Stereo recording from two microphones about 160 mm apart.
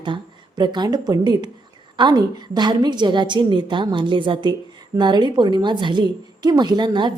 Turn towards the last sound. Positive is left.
turn(degrees=-30)  # may be behind; listen again after turning